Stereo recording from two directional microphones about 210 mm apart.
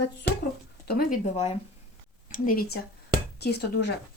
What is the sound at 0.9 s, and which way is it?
Speech, 45° left (ahead or behind).